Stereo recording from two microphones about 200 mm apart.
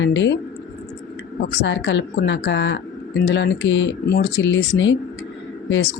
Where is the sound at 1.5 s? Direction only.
65° left (ahead or behind).